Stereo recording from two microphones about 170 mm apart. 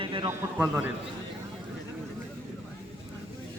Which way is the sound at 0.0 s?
30° right (ahead or behind).